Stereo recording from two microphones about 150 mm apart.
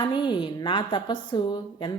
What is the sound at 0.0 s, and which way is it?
A woman's voice, 30° left (ahead or behind).